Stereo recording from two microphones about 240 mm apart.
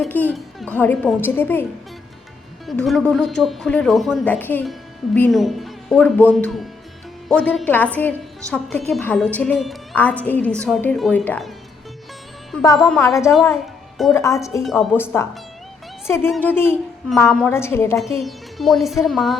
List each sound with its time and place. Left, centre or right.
0.0 s speech: centre
2.6 s a woman's voice: centre
12.7 s a woman's voice: centre
14.1 s speech: centre
14.6 s a woman's voice: centre
14.9 s speech: centre
18.2 s a woman's voice: centre